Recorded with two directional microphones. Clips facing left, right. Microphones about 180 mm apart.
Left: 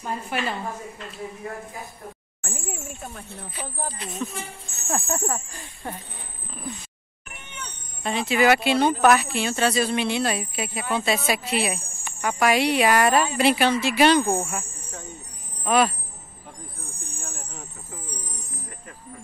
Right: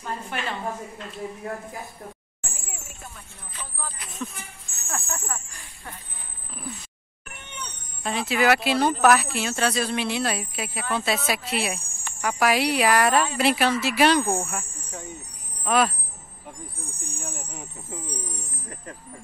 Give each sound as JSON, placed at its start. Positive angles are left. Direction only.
{"t": 0.0, "sound": "a woman's voice", "side_deg": 10}
{"t": 3.6, "sound": "speech", "side_deg": 50}
{"t": 4.4, "sound": "speech", "side_deg": 30}
{"t": 8.0, "sound": "speech", "side_deg": 0}
{"t": 15.6, "sound": "speech", "side_deg": 0}
{"t": 17.0, "sound": "a sound", "side_deg": -15}